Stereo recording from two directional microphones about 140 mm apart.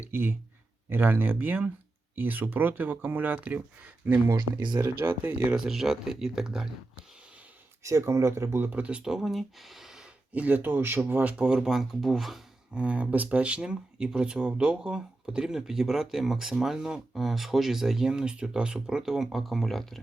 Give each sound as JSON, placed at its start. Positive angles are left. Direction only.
{"t": 0.0, "sound": "speech", "side_deg": -15}
{"t": 4.3, "sound": "speech", "side_deg": -30}
{"t": 5.0, "sound": "speech", "side_deg": -10}
{"t": 7.9, "sound": "speech", "side_deg": -20}